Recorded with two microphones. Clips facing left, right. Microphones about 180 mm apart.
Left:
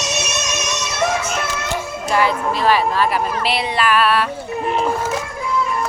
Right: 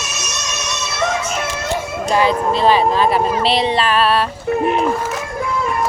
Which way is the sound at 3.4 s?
30° right (ahead or behind).